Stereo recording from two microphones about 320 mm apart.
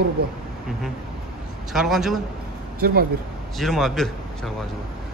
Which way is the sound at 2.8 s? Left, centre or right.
Right.